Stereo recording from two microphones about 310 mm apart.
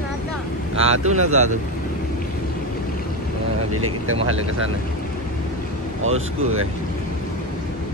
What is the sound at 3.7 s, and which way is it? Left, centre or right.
Speech, right.